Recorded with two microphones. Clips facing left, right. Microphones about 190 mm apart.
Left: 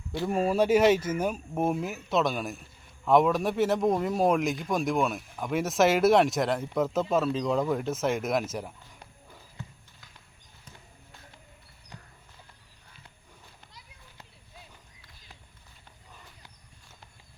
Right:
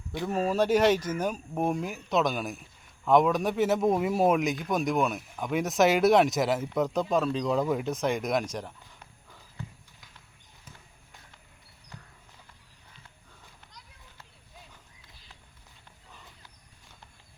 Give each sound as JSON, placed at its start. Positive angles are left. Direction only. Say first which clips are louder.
{"t": 0.3, "sound": "speech", "louder": "left 1 dB", "side_deg": 10}
{"t": 11.9, "sound": "horse", "louder": "even", "side_deg": 15}